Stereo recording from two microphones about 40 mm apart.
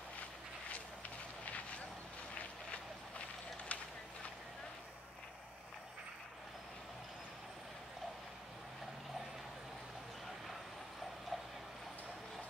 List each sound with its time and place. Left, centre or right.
2.7 s vehicle: left